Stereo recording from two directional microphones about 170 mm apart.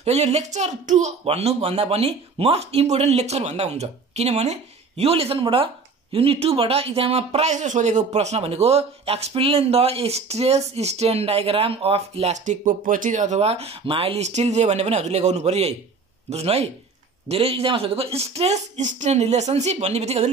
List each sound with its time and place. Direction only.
0.0 s speech: 40° right (ahead or behind)